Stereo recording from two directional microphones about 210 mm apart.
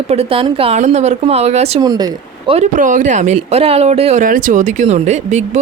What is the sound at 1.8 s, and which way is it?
Speech, 20° right (ahead or behind).